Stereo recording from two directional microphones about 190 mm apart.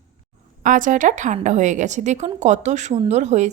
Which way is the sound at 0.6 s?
45° right (ahead or behind).